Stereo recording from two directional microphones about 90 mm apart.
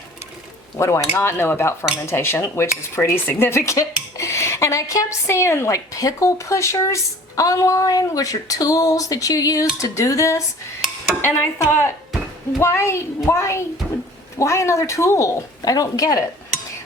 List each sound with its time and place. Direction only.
0.8 s speech: 30° left (ahead or behind)
10.8 s a sound: centre (ahead or behind)
11.2 s speech: 25° left (ahead or behind)